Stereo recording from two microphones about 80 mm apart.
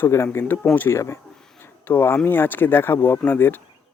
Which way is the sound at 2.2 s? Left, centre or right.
Left.